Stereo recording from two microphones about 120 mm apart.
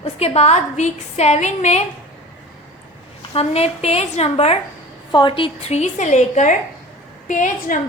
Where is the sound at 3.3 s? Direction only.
60° left (ahead or behind).